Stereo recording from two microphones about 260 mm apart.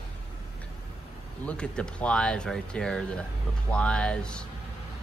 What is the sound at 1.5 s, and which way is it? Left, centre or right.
Speech, centre.